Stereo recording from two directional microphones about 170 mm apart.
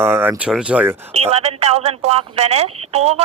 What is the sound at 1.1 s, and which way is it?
Speech, 40° right (ahead or behind).